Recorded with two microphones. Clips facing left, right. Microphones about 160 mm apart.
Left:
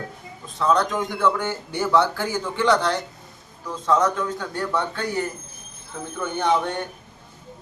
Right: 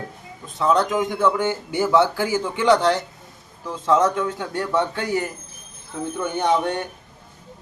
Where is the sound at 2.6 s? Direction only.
25° right (ahead or behind).